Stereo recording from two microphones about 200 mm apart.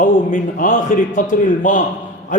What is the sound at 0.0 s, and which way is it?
A man's voice, 40° left (ahead or behind).